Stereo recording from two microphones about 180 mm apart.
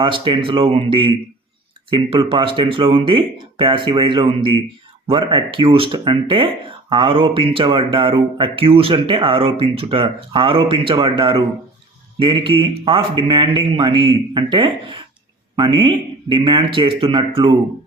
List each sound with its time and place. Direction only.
0.0 s speech: 30° right (ahead or behind)